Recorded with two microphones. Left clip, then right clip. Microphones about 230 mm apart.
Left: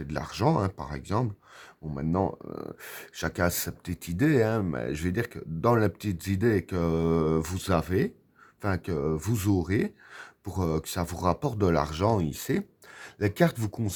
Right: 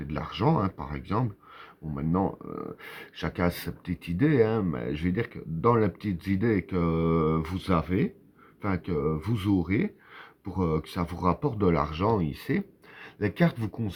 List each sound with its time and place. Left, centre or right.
0.1 s speech: left